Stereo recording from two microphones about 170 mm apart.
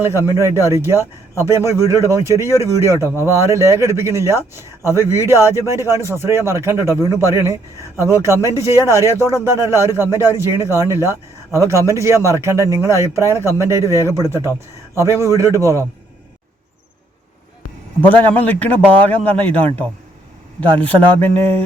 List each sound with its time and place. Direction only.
0.0 s a man's voice: 15° right (ahead or behind)
18.0 s a man's voice: 10° left (ahead or behind)
20.8 s a man's voice: 10° left (ahead or behind)